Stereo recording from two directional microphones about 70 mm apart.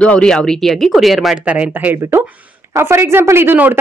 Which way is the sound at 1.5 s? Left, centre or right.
Centre.